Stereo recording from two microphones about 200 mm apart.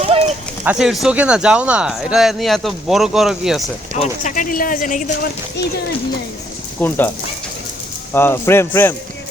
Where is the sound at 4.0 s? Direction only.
40° left (ahead or behind).